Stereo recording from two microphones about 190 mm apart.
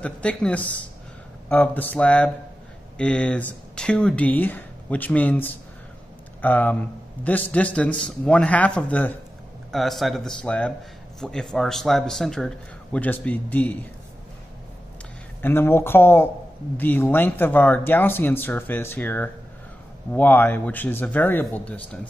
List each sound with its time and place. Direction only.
0.0 s a man's voice: 5° left (ahead or behind)
15.4 s speech: 10° left (ahead or behind)